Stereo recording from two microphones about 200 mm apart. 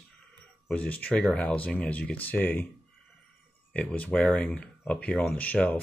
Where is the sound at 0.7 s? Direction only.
5° left (ahead or behind).